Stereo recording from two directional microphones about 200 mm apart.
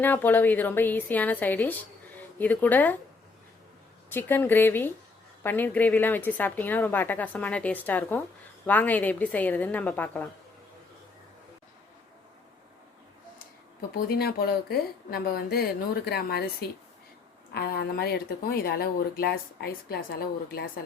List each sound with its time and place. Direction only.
0.0 s a woman's voice: 10° left (ahead or behind)
4.1 s a woman's voice: 10° left (ahead or behind)
13.9 s speech: 50° left (ahead or behind)